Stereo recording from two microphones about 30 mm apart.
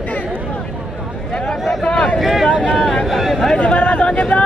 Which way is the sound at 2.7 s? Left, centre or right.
Centre.